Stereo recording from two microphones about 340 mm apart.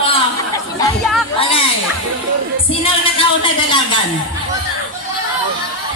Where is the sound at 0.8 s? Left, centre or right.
Centre.